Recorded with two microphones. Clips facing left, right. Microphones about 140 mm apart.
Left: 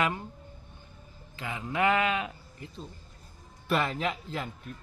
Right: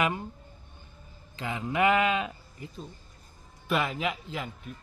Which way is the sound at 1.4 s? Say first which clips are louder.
Right 2 dB; 20° right (ahead or behind).